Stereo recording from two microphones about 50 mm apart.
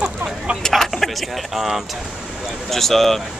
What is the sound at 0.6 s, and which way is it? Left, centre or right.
Vehicle, centre.